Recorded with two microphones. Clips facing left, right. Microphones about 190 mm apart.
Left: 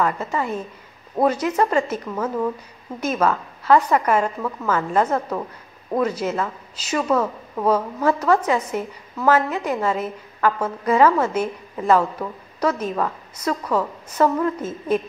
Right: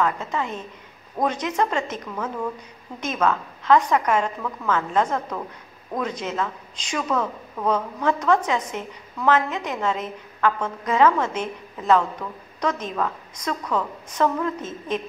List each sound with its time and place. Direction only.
0.0 s a woman's voice: 5° left (ahead or behind)